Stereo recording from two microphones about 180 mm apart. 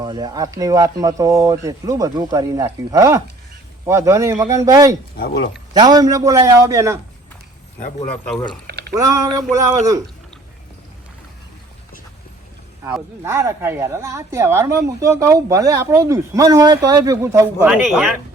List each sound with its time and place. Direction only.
0.0 s a woman's voice: 25° right (ahead or behind)
5.1 s speech: 60° left (ahead or behind)
5.7 s speech: 20° right (ahead or behind)
8.1 s speech: 5° left (ahead or behind)
8.9 s speech: 20° right (ahead or behind)
13.2 s a woman's voice: 15° right (ahead or behind)
17.7 s speech: 5° right (ahead or behind)